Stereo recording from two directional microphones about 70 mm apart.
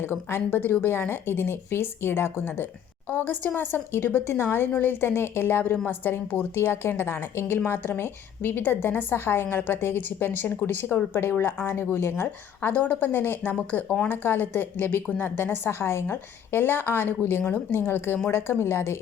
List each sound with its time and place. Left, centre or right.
0.0 s a woman's voice: left